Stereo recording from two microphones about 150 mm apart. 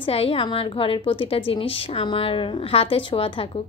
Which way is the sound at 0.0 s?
40° left (ahead or behind).